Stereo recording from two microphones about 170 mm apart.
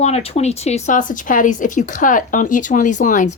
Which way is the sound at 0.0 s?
40° left (ahead or behind).